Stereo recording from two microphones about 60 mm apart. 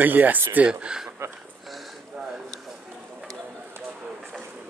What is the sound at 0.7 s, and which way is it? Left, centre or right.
Speech, centre.